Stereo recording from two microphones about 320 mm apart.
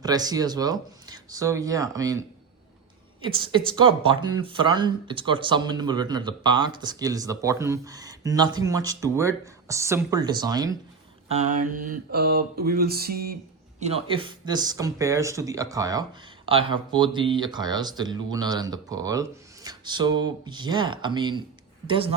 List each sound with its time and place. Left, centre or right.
0.0 s speech: centre
3.2 s speech: centre
11.3 s mantra: right
13.7 s speech: centre